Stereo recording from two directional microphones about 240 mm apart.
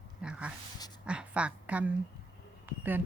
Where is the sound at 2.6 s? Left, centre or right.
Centre.